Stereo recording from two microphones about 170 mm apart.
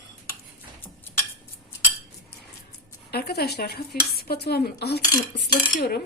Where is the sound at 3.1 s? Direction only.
70° left (ahead or behind).